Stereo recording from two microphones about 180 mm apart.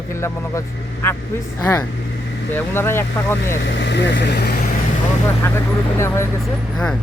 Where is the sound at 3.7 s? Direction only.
80° left.